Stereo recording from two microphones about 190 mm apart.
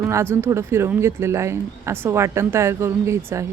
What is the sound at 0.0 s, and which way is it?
Speech, 15° right (ahead or behind).